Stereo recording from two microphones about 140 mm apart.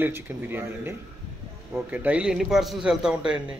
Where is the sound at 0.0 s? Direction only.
15° right (ahead or behind).